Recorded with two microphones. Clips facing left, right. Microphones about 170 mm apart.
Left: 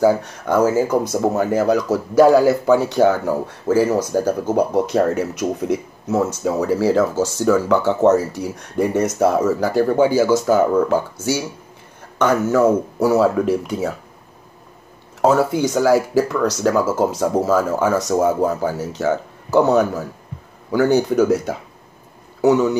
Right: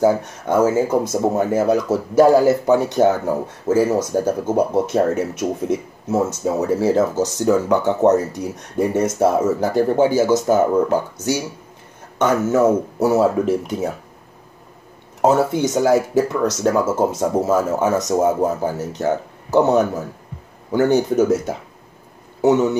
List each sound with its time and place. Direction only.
0.0 s speech: 25° right (ahead or behind)
15.2 s speech: 20° right (ahead or behind)